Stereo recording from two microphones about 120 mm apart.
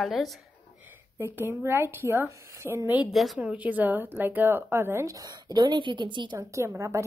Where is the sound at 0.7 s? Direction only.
20° right (ahead or behind).